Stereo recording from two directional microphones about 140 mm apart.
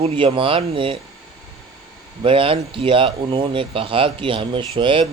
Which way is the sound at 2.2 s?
40° right (ahead or behind).